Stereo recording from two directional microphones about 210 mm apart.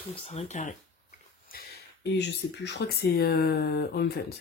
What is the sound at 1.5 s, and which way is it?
Speech, 50° left (ahead or behind).